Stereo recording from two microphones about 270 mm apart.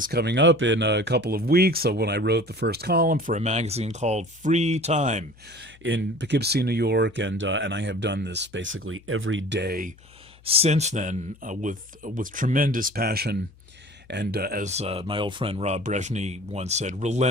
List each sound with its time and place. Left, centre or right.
0.0 s speech: right
5.5 s speech: right
10.4 s speech: right